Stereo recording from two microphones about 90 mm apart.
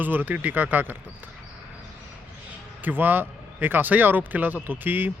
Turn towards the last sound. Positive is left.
turn(degrees=-20)  # may be behind; listen again after turning